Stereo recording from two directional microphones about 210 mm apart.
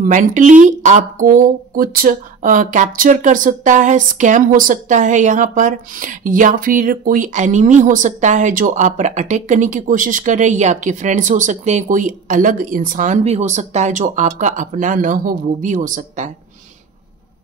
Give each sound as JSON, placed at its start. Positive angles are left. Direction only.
{"t": 0.0, "sound": "speech", "side_deg": -40}